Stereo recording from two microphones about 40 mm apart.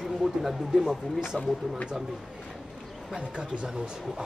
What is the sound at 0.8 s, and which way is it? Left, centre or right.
Speech, centre.